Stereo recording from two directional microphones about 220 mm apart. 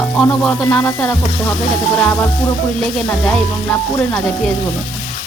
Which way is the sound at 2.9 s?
Centre (ahead or behind).